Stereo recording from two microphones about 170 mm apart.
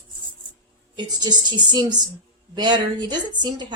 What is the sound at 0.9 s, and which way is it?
A woman's voice, 25° right (ahead or behind).